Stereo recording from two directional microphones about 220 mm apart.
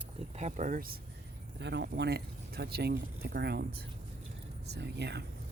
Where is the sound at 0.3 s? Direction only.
35° right (ahead or behind).